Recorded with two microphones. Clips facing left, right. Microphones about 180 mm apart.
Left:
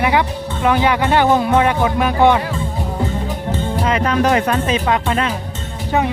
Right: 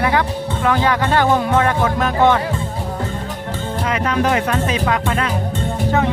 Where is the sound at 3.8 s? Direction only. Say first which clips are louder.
Left 2 dB; 30° left (ahead or behind).